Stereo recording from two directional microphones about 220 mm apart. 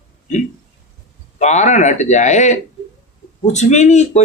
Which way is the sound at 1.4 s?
30° left (ahead or behind).